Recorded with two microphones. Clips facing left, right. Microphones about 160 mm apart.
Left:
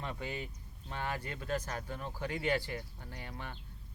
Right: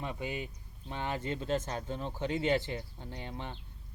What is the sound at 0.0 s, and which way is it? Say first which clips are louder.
Speech: right 3 dB; 15° right (ahead or behind).